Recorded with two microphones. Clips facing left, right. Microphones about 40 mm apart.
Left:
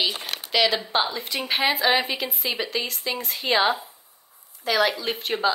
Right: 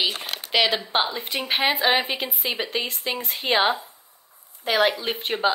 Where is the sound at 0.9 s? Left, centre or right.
Right.